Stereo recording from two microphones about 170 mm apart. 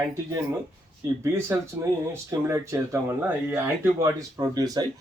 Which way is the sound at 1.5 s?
15° right (ahead or behind).